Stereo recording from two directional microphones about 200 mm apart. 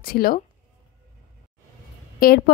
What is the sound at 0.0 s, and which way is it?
Speech, 50° left (ahead or behind).